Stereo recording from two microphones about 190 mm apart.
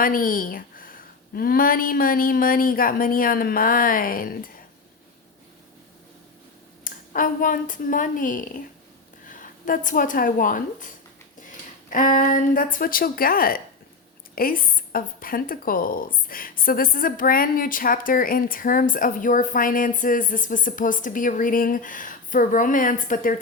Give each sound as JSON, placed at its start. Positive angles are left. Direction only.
{"t": 0.0, "sound": "speech", "side_deg": 45}
{"t": 6.8, "sound": "a woman's voice", "side_deg": 45}